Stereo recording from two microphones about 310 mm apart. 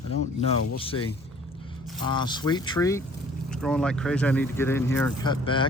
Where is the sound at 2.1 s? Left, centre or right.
Centre.